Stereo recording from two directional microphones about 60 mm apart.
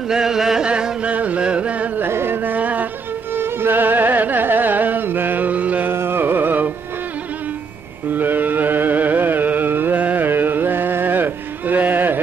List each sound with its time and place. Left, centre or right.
0.1 s chant: centre
0.7 s a sound: centre
1.1 s music: right
2.0 s music: right
3.3 s music: right
5.9 s carnatic music: right
8.1 s music: right